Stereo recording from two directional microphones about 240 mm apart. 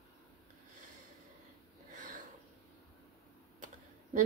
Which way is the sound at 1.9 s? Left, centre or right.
Right.